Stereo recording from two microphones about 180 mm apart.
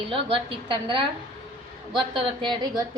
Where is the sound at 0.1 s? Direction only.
30° right (ahead or behind).